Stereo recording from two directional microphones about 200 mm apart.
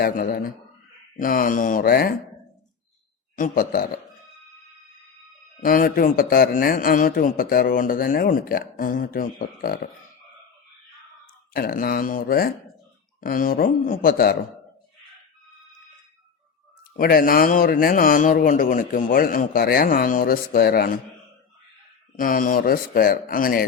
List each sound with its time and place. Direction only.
0.0 s a man's voice: 50° left (ahead or behind)
3.3 s a man's voice: 45° left (ahead or behind)
5.6 s a man's voice: 45° left (ahead or behind)
11.5 s a man's voice: 45° left (ahead or behind)
17.0 s a man's voice: 45° left (ahead or behind)
22.2 s a man's voice: 45° left (ahead or behind)